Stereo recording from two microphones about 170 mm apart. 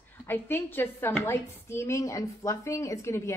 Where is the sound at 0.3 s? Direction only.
10° left (ahead or behind).